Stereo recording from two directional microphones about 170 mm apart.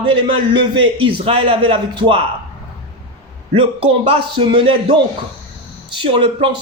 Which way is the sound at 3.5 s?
30° right (ahead or behind).